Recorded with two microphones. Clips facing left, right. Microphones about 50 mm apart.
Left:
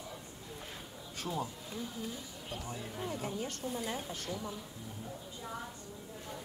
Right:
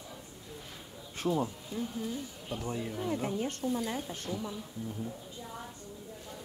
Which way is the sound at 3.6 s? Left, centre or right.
Centre.